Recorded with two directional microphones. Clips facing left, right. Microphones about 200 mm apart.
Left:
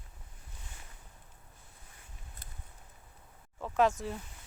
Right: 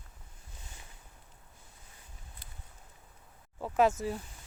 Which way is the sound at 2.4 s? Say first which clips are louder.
Left 1 dB; 45° left (ahead or behind).